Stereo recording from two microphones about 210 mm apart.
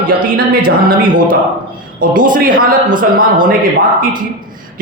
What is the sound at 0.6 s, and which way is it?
Speech, 20° right (ahead or behind).